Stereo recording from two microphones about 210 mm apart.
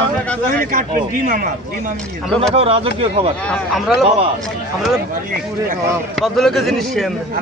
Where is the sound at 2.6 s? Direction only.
30° right (ahead or behind).